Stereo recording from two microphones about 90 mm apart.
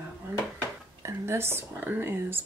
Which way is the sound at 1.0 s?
30° right (ahead or behind).